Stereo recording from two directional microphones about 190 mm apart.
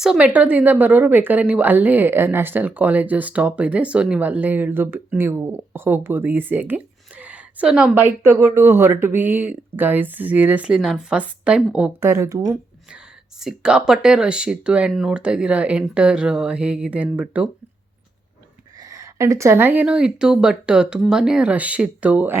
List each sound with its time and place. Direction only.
0.0 s a woman's voice: 5° right (ahead or behind)
13.4 s speech: 5° right (ahead or behind)
18.8 s a woman's voice: 15° right (ahead or behind)